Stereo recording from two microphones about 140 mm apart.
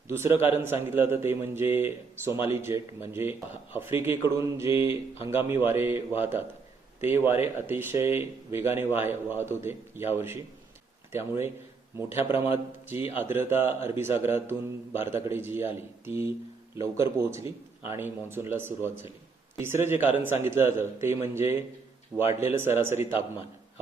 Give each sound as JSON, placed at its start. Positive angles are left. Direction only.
{"t": 0.1, "sound": "a man's voice", "side_deg": -15}
{"t": 13.1, "sound": "a man's voice", "side_deg": -15}